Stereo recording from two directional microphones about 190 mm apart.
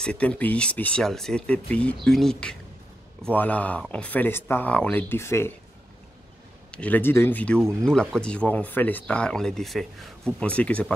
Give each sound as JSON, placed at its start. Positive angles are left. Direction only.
{"t": 0.0, "sound": "speech", "side_deg": 5}
{"t": 6.7, "sound": "speech", "side_deg": 5}